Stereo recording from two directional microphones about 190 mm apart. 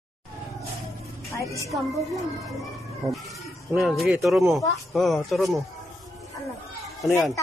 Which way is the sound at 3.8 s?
Centre (ahead or behind).